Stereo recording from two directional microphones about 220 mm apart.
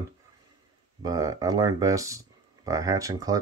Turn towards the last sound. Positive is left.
turn(degrees=-15)  # may be behind; listen again after turning